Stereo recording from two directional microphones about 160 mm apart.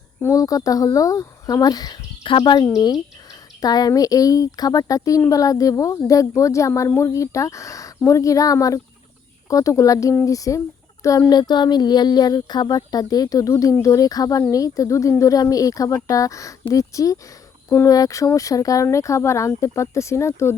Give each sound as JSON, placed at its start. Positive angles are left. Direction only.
{"t": 0.2, "sound": "speech", "side_deg": 20}